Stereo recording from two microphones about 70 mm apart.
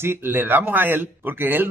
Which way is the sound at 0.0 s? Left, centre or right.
Right.